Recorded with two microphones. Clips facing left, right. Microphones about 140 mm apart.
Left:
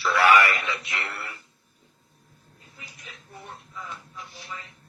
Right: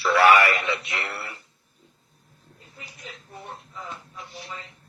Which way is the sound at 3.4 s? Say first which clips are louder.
Right 1 dB; 20° right (ahead or behind).